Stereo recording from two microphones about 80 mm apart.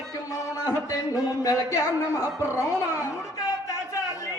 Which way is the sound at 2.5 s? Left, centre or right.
Left.